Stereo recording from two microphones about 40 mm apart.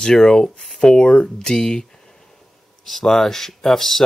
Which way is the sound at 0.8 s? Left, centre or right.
Centre.